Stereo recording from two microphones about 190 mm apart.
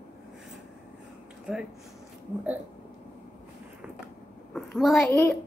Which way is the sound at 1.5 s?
5° right (ahead or behind).